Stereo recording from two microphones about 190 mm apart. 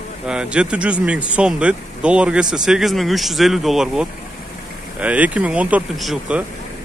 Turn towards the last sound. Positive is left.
turn(degrees=-5)  # may be behind; listen again after turning